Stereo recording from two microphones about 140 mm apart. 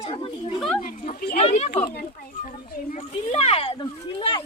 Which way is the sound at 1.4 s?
50° left (ahead or behind).